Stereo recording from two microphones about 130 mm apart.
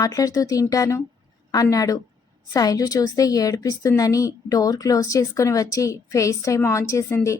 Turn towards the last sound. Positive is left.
turn(degrees=25)  # may be behind; listen again after turning